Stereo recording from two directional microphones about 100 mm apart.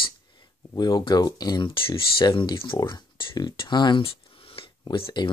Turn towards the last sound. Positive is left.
turn(degrees=60)  # may be behind; listen again after turning